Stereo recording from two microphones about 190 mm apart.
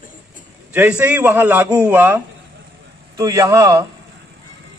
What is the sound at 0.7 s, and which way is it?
A man's voice, 10° right (ahead or behind).